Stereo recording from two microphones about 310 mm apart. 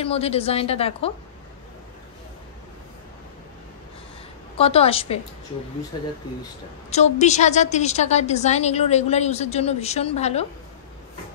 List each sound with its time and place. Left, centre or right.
0.0 s a woman's voice: centre
4.6 s a woman's voice: centre
6.9 s a woman's voice: left